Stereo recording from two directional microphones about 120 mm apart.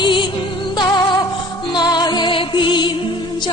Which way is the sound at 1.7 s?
35° left (ahead or behind).